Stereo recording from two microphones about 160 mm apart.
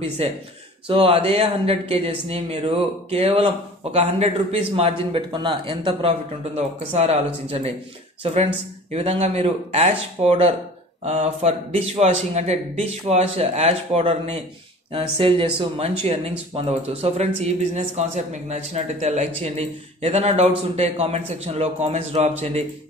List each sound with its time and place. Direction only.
0.2 s speech: 40° right (ahead or behind)
8.2 s a man's voice: 40° right (ahead or behind)